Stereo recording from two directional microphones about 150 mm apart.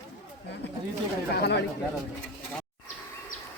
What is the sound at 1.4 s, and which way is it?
Speech, 90° left.